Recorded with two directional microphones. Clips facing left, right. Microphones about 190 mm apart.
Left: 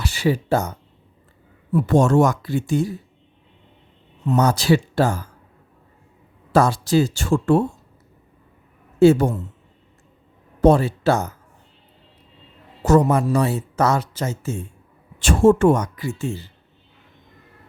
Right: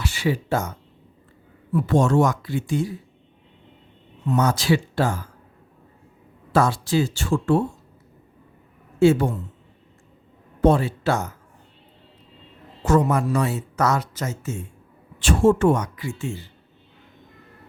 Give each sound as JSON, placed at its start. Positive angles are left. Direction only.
{"t": 0.0, "sound": "speech", "side_deg": 40}
{"t": 1.7, "sound": "speech", "side_deg": 45}
{"t": 4.3, "sound": "speech", "side_deg": 40}
{"t": 6.5, "sound": "speech", "side_deg": 40}
{"t": 9.0, "sound": "speech", "side_deg": 40}
{"t": 10.6, "sound": "speech", "side_deg": 40}
{"t": 12.8, "sound": "speech", "side_deg": 40}
{"t": 15.2, "sound": "speech", "side_deg": 45}